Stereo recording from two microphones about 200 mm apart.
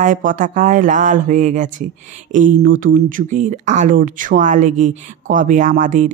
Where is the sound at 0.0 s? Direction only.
40° right (ahead or behind).